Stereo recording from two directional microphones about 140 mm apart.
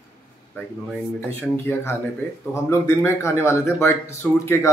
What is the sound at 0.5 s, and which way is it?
A man's voice, 10° left (ahead or behind).